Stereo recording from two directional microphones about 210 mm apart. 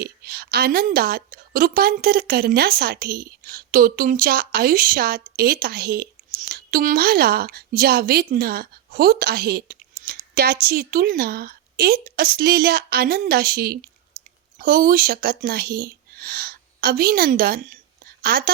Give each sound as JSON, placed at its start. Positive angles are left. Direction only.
{"t": 0.0, "sound": "a woman's voice", "side_deg": -50}